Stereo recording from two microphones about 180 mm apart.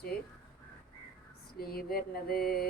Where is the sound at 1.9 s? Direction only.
55° left (ahead or behind).